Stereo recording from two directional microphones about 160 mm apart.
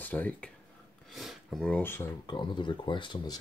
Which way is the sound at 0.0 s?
10° left (ahead or behind).